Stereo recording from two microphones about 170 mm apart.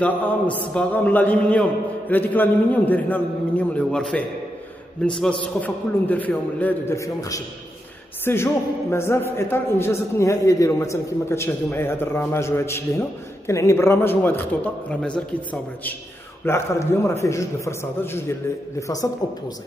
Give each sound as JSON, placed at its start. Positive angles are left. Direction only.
{"t": 0.0, "sound": "a man's voice", "side_deg": 10}
{"t": 16.4, "sound": "a man's voice", "side_deg": 15}